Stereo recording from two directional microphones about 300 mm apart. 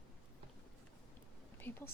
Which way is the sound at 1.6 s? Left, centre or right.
Centre.